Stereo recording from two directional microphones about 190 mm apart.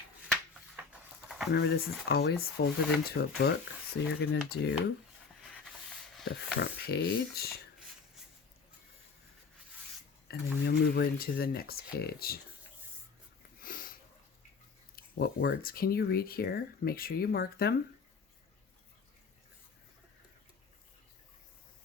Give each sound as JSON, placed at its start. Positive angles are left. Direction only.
{"t": 0.8, "sound": "a sound", "side_deg": -10}
{"t": 1.5, "sound": "speech", "side_deg": 55}
{"t": 6.2, "sound": "speech", "side_deg": 65}
{"t": 10.2, "sound": "speech", "side_deg": 60}
{"t": 13.6, "sound": "sniff", "side_deg": 50}
{"t": 14.9, "sound": "speech", "side_deg": 55}